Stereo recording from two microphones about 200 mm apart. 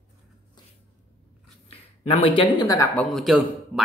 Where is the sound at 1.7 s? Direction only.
30° left (ahead or behind).